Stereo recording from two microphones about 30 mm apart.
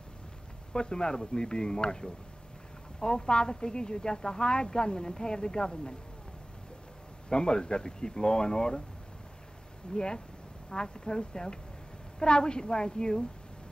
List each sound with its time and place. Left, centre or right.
0.7 s speech: left
7.2 s speech: left
9.9 s speech: left